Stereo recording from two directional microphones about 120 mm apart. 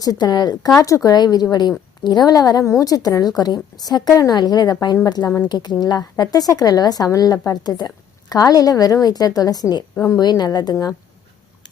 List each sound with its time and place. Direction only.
0.0 s a woman's voice: 35° left (ahead or behind)